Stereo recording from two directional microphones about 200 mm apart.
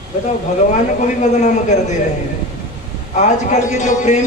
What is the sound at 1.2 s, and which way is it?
Speech, 35° left (ahead or behind).